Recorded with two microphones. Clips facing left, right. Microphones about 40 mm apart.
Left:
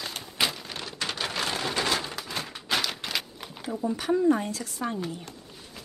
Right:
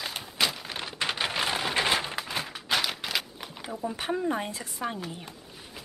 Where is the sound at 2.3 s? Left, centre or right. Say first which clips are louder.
Even; centre.